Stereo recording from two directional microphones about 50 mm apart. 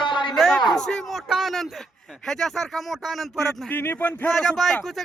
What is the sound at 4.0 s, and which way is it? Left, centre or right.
Speech, left.